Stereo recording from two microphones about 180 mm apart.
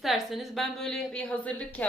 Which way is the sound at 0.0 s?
Centre (ahead or behind).